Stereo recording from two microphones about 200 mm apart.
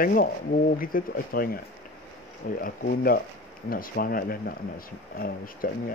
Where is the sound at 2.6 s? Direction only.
45° left (ahead or behind).